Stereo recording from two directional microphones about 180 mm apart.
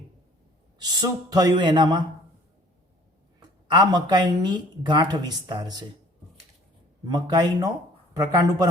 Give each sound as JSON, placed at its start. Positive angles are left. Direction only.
{"t": 0.8, "sound": "speech", "side_deg": -20}
{"t": 3.7, "sound": "speech", "side_deg": -25}
{"t": 7.0, "sound": "speech", "side_deg": -25}